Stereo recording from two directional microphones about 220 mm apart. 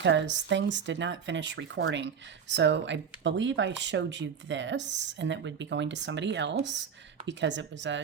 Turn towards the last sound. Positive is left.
turn(degrees=-55)  # may be behind; listen again after turning